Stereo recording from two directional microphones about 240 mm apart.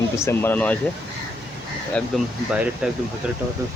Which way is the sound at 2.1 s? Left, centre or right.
Centre.